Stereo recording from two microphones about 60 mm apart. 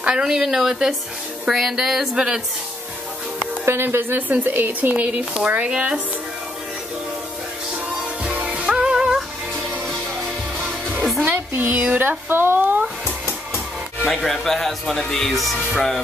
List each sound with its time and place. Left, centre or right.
0.0 s a woman's voice: centre
3.3 s speech: right; by 5.9 s centre
8.2 s music: right
10.6 s music: centre
11.3 s speech: right
14.0 s speech: centre